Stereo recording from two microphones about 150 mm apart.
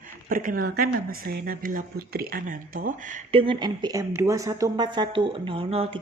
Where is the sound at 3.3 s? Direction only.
35° right (ahead or behind).